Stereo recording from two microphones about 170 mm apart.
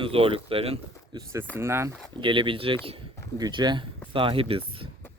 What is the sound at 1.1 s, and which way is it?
Speech, 15° right (ahead or behind).